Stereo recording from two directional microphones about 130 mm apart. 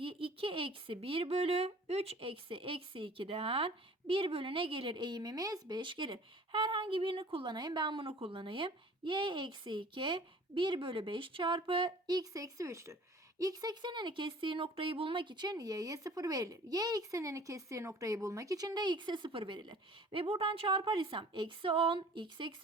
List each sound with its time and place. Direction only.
0.0 s a child's voice: 45° right (ahead or behind)